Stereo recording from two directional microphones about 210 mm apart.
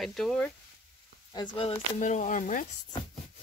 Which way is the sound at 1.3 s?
20° left (ahead or behind).